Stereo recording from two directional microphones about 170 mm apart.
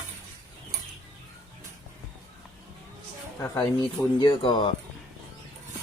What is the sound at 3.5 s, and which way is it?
Speech, 25° left (ahead or behind).